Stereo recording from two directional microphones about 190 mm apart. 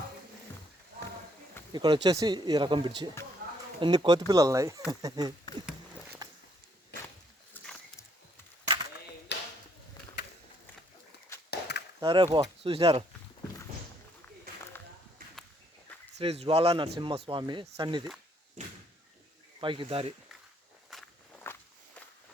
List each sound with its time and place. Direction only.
1.7 s speech: 25° right (ahead or behind)
4.3 s chopping: 20° right (ahead or behind)
4.9 s speech: 20° right (ahead or behind)
7.5 s dog: 10° left (ahead or behind)
9.3 s a sound: 65° left (ahead or behind)
11.5 s a sound: 60° left (ahead or behind)
11.9 s speech: 25° right (ahead or behind)
15.2 s walk: 50° right (ahead or behind)
16.1 s a man's voice: 30° right (ahead or behind)
19.5 s speech: 25° right (ahead or behind)
20.9 s walk: centre (ahead or behind)
21.5 s walk: 10° left (ahead or behind)